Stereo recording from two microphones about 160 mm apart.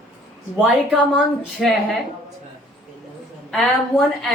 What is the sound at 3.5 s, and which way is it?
Speech, centre (ahead or behind).